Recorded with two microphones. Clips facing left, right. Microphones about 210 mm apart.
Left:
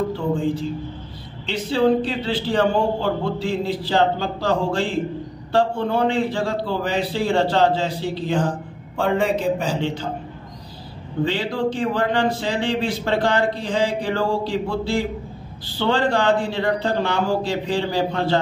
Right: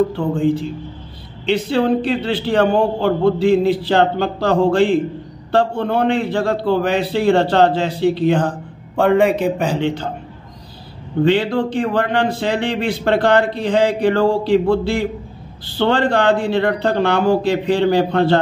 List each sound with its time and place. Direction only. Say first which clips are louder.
1.4 s speech: right 3 dB; 60° right (ahead or behind)
11.2 s speech: right 7 dB; 60° right (ahead or behind)